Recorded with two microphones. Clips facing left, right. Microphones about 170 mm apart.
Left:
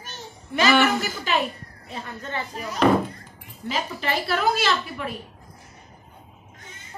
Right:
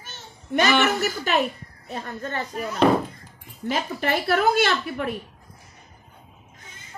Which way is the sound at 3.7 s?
50° right (ahead or behind).